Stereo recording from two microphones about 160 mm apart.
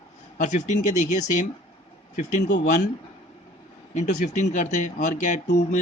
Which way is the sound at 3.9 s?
50° left (ahead or behind).